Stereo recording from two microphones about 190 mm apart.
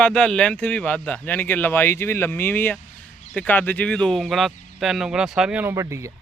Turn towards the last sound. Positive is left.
turn(degrees=-15)  # may be behind; listen again after turning